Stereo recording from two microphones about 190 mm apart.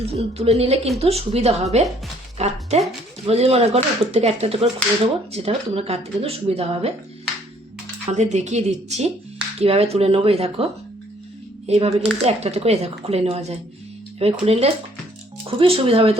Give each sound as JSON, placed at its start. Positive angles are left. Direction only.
{"t": 0.0, "sound": "a woman's voice", "side_deg": -30}
{"t": 8.1, "sound": "a woman's voice", "side_deg": -35}